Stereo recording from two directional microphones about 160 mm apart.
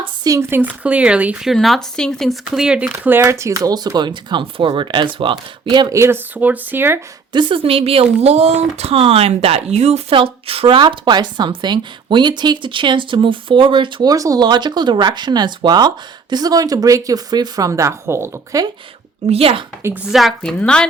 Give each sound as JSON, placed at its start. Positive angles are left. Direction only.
{"t": 0.0, "sound": "speech", "side_deg": -20}
{"t": 7.3, "sound": "speech", "side_deg": -30}
{"t": 19.3, "sound": "speech", "side_deg": -35}
{"t": 20.1, "sound": "a woman's voice", "side_deg": 0}